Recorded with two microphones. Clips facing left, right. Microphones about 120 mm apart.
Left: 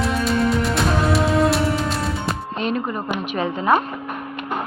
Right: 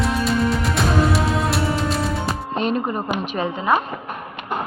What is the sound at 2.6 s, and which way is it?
Music, 45° right (ahead or behind).